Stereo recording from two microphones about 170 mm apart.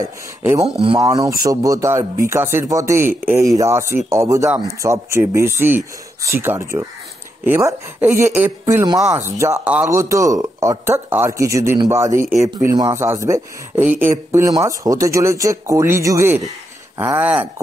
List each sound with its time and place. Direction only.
0.0 s a man's voice: 20° right (ahead or behind)